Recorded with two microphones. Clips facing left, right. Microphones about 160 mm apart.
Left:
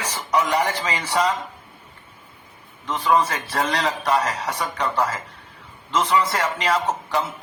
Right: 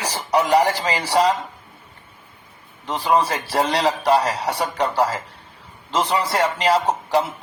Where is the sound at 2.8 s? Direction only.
35° right (ahead or behind).